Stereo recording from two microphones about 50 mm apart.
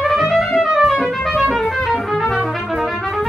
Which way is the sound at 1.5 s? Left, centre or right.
Centre.